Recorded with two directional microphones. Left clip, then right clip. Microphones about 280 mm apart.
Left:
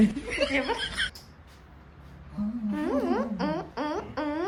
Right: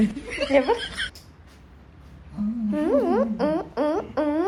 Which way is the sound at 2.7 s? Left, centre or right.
Centre.